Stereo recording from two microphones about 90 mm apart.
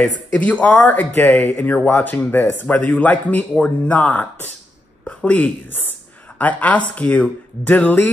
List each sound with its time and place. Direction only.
0.0 s speech: 15° left (ahead or behind)